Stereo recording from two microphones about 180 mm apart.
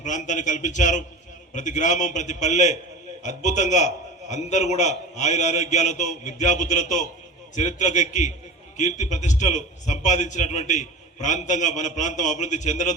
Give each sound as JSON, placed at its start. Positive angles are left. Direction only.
{"t": 0.0, "sound": "a man's voice", "side_deg": 45}